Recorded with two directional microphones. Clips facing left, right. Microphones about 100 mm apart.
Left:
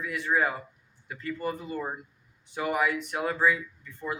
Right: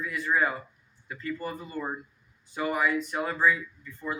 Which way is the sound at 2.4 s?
65° left (ahead or behind).